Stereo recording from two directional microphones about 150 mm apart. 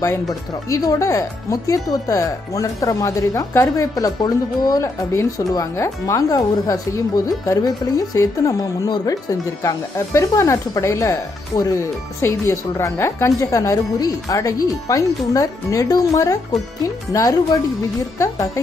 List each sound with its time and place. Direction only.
0.3 s speech: 25° left (ahead or behind)